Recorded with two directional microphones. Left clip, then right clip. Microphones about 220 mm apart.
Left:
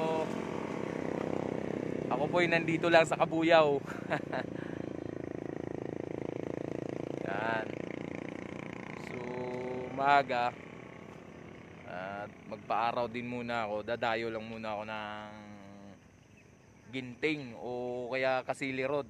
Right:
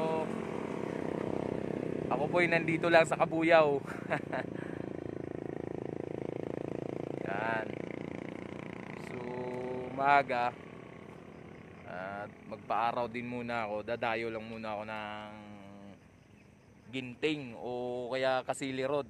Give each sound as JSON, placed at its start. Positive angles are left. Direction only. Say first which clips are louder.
{"t": 0.2, "sound": "vehicle", "louder": "left 1 dB", "side_deg": 35}
{"t": 2.0, "sound": "speech", "louder": "even", "side_deg": -5}
{"t": 5.1, "sound": "vehicle", "louder": "even", "side_deg": 30}
{"t": 7.2, "sound": "vehicle", "louder": "even", "side_deg": -5}
{"t": 7.7, "sound": "vehicle", "louder": "left 1 dB", "side_deg": 25}
{"t": 9.9, "sound": "speech", "louder": "even", "side_deg": -5}
{"t": 11.9, "sound": "speech", "louder": "even", "side_deg": 0}
{"t": 16.9, "sound": "speech", "louder": "even", "side_deg": -5}